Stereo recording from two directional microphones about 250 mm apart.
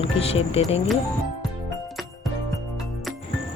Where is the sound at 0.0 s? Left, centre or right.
Left.